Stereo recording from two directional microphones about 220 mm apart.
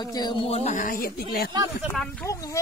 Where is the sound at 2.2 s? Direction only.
15° left (ahead or behind).